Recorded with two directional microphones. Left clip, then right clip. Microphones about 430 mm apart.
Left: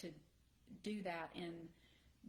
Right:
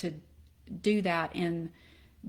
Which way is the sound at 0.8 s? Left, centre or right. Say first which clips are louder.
Right 17 dB; right.